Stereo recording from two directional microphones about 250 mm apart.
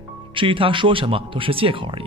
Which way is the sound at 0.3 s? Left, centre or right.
Centre.